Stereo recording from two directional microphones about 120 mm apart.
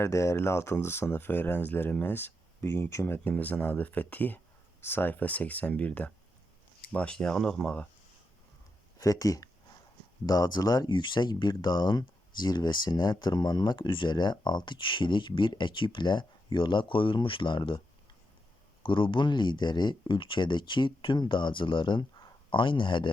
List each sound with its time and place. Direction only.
0.0 s speech: 25° left (ahead or behind); by 7.9 s 5° left (ahead or behind)
9.0 s speech: 30° left (ahead or behind)
18.8 s speech: 45° left (ahead or behind)